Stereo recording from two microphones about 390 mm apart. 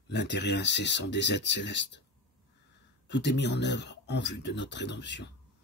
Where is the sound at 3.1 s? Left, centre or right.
Left.